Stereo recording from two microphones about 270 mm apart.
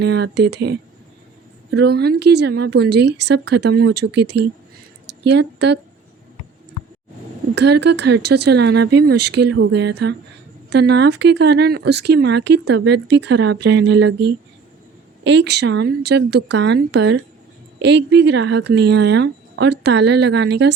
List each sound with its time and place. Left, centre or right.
0.0 s speech: right
1.7 s a woman's voice: right
7.5 s speech: right